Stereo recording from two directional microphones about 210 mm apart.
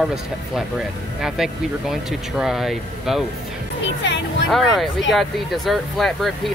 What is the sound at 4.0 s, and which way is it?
Speech, 60° left (ahead or behind).